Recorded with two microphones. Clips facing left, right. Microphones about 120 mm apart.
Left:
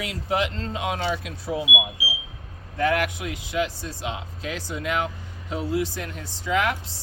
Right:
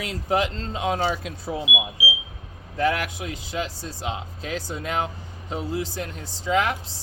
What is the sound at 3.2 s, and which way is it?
Speech, 35° right (ahead or behind).